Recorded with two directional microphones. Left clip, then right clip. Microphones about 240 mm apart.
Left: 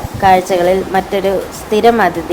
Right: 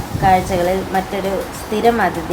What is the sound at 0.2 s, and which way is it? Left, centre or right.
Speech, left.